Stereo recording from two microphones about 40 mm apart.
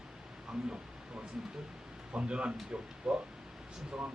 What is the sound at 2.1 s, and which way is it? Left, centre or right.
Speech, right.